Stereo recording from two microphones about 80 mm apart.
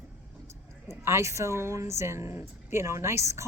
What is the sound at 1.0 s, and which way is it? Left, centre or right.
Speech, right.